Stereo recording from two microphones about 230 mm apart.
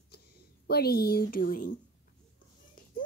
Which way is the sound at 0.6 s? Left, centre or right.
Left.